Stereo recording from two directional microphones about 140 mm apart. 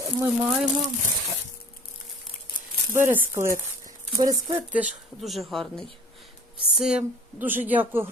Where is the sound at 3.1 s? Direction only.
15° right (ahead or behind).